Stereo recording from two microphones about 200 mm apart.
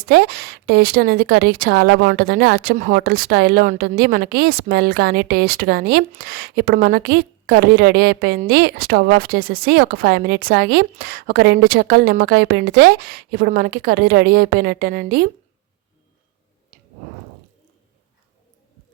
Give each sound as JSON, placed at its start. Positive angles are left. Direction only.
{"t": 0.0, "sound": "speech", "side_deg": -50}